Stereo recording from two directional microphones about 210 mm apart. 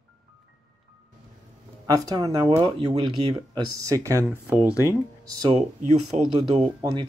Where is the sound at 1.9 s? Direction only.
15° right (ahead or behind).